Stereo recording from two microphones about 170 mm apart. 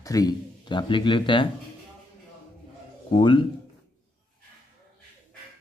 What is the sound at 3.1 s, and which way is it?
Speech, 30° left (ahead or behind).